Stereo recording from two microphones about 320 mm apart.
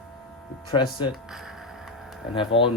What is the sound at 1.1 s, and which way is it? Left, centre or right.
Music, centre.